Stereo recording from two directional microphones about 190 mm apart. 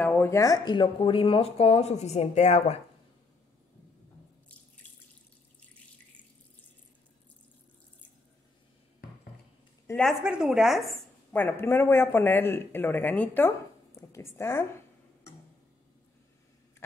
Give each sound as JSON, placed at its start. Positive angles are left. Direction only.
{"t": 0.0, "sound": "speech", "side_deg": 10}
{"t": 9.8, "sound": "a woman's voice", "side_deg": 5}
{"t": 11.4, "sound": "a woman's voice", "side_deg": 10}